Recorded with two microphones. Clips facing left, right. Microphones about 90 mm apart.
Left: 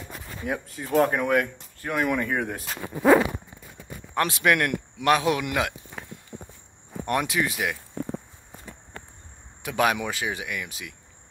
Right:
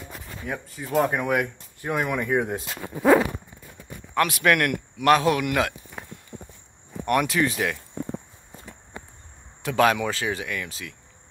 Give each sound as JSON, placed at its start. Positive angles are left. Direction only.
{"t": 0.5, "sound": "speech", "side_deg": 0}
{"t": 1.9, "sound": "speech", "side_deg": -20}
{"t": 4.1, "sound": "a man's voice", "side_deg": 20}
{"t": 7.1, "sound": "a man's voice", "side_deg": 20}
{"t": 7.3, "sound": "speech", "side_deg": 10}
{"t": 9.6, "sound": "speech", "side_deg": 15}